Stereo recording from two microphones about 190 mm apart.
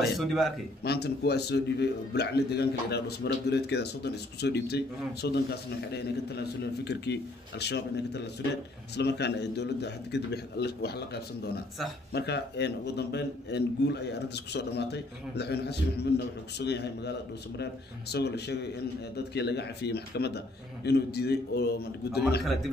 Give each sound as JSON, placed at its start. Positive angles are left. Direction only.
{"t": 0.2, "sound": "a man's voice", "side_deg": 0}
{"t": 0.8, "sound": "a man's voice", "side_deg": 60}
{"t": 12.1, "sound": "a man's voice", "side_deg": 60}
{"t": 18.1, "sound": "a man's voice", "side_deg": 60}